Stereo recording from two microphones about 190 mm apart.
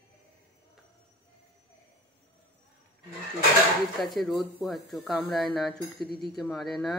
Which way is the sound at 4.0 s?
Centre (ahead or behind).